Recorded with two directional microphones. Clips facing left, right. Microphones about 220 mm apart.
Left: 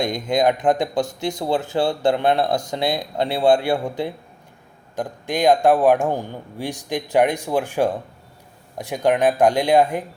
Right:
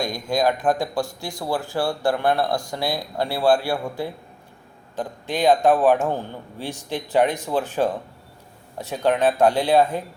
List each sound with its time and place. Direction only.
0.0 s speech: 20° left (ahead or behind)